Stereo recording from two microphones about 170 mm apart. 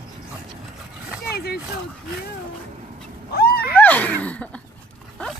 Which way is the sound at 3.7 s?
10° left (ahead or behind).